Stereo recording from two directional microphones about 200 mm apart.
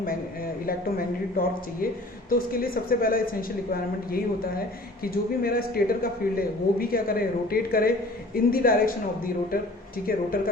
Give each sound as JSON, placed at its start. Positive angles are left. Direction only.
{"t": 0.6, "sound": "speech", "side_deg": 45}